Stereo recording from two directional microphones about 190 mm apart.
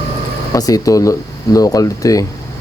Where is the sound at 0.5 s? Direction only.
20° left (ahead or behind).